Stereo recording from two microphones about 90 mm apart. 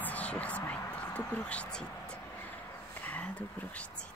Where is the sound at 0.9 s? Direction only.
15° left (ahead or behind).